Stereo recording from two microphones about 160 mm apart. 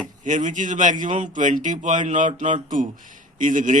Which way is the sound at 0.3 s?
50° right (ahead or behind).